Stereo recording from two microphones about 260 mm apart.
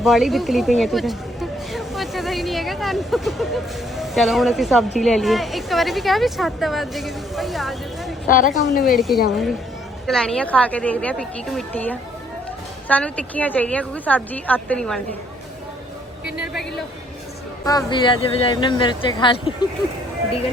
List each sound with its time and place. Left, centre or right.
0.0 s a sound: centre
4.9 s a woman's voice: centre
8.3 s a woman's voice: left
8.7 s a woman's voice: centre
16.3 s a sound: centre
17.7 s speech: centre